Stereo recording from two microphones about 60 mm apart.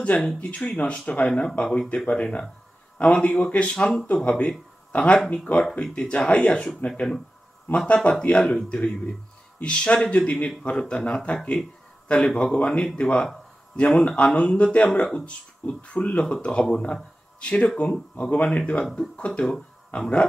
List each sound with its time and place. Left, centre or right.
0.0 s speech: left
6.9 s speech: centre
15.2 s speech: left